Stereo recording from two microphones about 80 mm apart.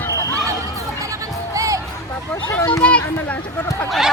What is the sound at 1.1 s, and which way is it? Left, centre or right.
Music, right.